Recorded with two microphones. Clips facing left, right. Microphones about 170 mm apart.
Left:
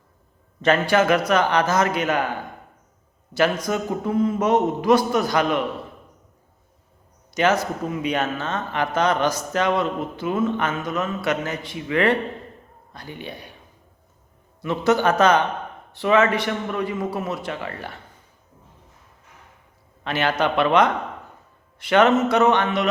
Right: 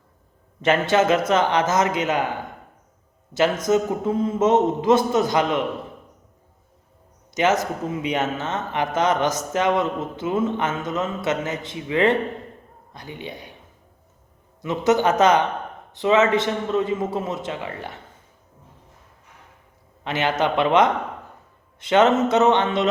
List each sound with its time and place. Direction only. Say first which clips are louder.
0.6 s a man's voice: even; 20° right (ahead or behind)
3.3 s a man's voice: right 2 dB; 20° right (ahead or behind)
7.3 s a man's voice: even; 20° right (ahead or behind)
14.6 s a man's voice: even; 20° right (ahead or behind)
20.1 s a man's voice: even; 20° right (ahead or behind)